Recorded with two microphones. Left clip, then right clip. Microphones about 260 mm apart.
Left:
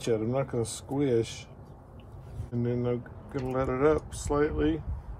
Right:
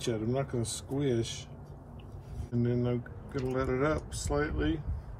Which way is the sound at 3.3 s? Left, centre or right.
Left.